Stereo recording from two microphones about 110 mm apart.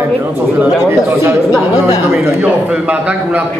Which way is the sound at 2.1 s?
15° right (ahead or behind).